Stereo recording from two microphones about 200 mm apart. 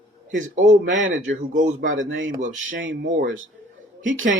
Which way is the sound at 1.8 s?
75° right (ahead or behind).